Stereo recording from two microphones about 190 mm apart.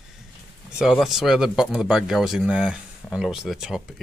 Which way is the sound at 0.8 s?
Centre (ahead or behind).